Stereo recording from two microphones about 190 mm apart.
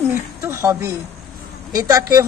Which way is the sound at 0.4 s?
15° right (ahead or behind).